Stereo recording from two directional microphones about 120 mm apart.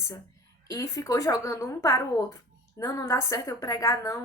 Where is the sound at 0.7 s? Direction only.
30° left (ahead or behind).